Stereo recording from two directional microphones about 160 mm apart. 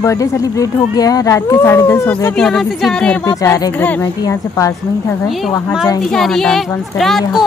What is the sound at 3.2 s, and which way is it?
Speech, 20° left (ahead or behind).